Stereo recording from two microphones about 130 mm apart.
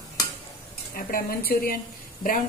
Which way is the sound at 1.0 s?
90° left.